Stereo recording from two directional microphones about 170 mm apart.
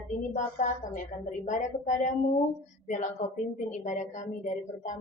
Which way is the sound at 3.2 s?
40° left (ahead or behind).